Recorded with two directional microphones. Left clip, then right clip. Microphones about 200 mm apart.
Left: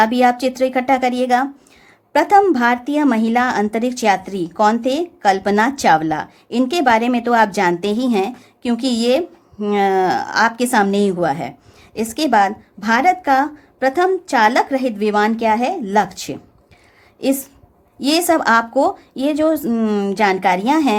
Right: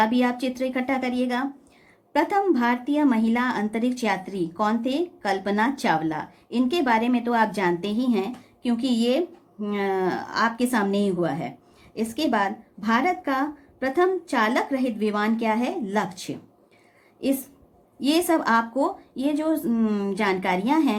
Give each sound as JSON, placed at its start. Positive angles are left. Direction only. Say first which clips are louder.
{"t": 0.0, "sound": "a woman's voice", "louder": "left 9 dB", "side_deg": 35}
{"t": 18.0, "sound": "a woman's voice", "louder": "left 7 dB", "side_deg": 40}